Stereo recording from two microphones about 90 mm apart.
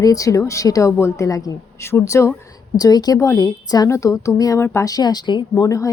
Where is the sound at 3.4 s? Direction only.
45° left (ahead or behind).